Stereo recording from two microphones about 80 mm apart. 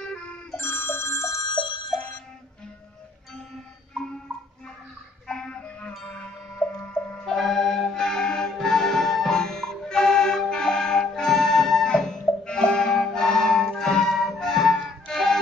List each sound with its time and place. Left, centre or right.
0.0 s ringtone: centre
0.6 s ringtone: left
1.5 s bicycle bell: left
5.3 s music: centre
7.2 s music: centre